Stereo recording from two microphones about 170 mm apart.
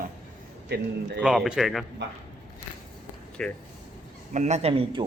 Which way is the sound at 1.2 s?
5° right (ahead or behind).